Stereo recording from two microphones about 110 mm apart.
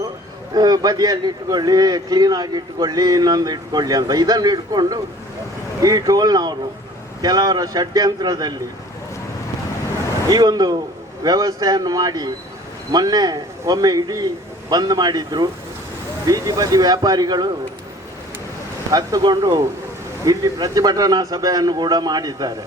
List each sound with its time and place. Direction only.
0.5 s a man's voice: 35° right (ahead or behind)
10.2 s a man's voice: 40° right (ahead or behind)
18.9 s a man's voice: 35° right (ahead or behind)